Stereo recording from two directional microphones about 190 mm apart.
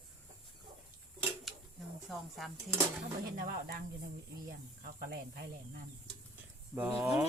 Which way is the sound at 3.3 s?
45° right (ahead or behind).